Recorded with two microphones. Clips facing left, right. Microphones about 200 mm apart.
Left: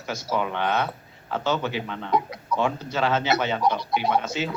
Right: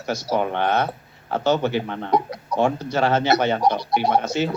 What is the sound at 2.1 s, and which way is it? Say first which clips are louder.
A man's voice: right 1 dB; 40° right (ahead or behind).